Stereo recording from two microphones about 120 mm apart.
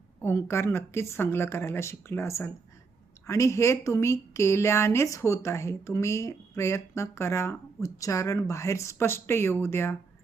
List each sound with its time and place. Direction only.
0.2 s a woman's voice: 20° left (ahead or behind)